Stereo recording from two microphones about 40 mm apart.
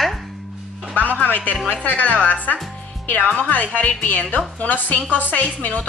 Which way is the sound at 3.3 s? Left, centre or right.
Left.